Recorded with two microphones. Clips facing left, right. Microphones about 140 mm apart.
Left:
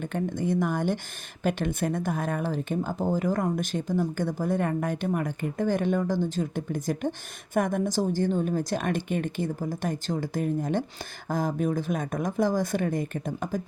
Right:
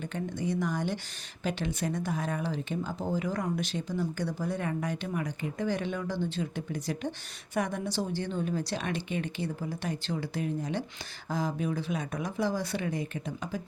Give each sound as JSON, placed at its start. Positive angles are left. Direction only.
{"t": 0.1, "sound": "speech", "side_deg": 50}